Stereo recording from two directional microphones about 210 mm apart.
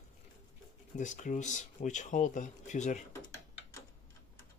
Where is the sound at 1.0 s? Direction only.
35° left (ahead or behind).